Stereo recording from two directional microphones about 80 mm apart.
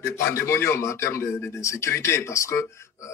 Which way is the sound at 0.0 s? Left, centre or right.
Left.